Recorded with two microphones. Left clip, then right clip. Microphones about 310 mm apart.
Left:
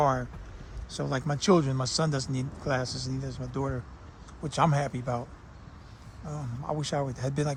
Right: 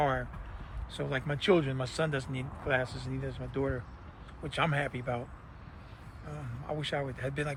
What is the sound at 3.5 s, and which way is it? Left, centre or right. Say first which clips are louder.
Speech: even; left.